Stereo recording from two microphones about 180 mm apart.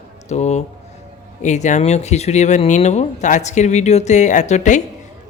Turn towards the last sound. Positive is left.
turn(degrees=45)  # may be behind; listen again after turning